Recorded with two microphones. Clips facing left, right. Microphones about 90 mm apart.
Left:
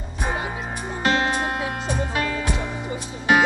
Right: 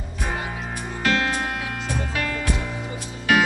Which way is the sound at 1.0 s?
25° left (ahead or behind).